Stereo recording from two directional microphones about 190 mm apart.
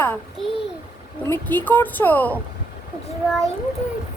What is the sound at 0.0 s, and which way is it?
A child's voice, 10° left (ahead or behind).